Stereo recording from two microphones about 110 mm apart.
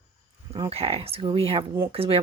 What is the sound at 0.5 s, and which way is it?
Speech, 60° right (ahead or behind).